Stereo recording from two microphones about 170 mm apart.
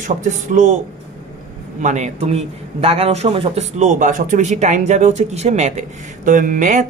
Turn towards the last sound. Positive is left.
turn(degrees=-50)  # may be behind; listen again after turning